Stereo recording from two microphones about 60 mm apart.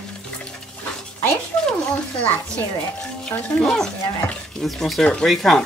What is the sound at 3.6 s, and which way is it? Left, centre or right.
Speech, centre.